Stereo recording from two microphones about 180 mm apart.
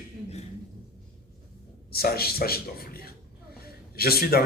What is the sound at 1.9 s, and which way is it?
Speech, 60° left (ahead or behind).